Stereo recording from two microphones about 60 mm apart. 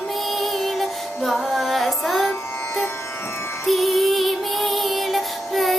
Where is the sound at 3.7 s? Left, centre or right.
Centre.